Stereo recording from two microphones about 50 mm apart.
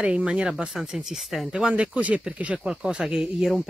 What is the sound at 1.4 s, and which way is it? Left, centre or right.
Speech, right.